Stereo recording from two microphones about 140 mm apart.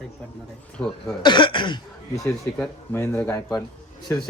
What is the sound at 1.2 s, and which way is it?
Cough, 35° left (ahead or behind).